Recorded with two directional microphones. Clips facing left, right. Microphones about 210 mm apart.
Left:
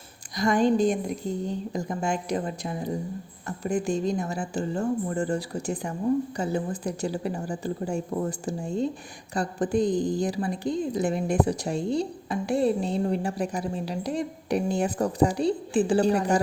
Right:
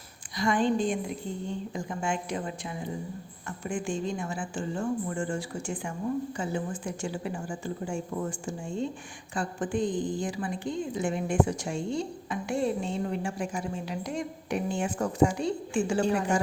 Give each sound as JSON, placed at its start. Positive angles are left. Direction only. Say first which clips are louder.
{"t": 0.3, "sound": "a woman's voice", "louder": "left 4 dB", "side_deg": 40}